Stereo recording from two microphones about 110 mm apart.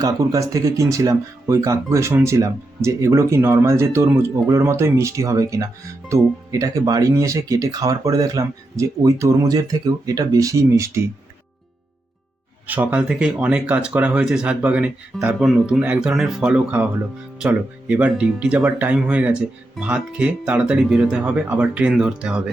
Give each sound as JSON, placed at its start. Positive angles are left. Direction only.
{"t": 0.0, "sound": "speech", "side_deg": -30}
{"t": 12.6, "sound": "speech", "side_deg": -15}